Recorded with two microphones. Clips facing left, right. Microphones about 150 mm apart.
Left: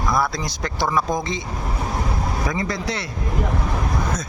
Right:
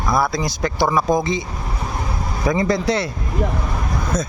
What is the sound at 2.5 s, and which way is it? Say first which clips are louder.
Speech: right 7 dB; 25° right (ahead or behind).